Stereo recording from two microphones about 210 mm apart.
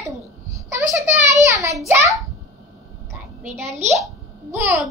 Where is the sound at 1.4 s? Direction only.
15° right (ahead or behind).